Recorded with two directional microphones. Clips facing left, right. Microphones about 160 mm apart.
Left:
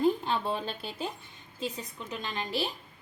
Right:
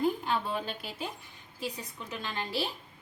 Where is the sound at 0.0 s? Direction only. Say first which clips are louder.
Left 3 dB; 25° left (ahead or behind).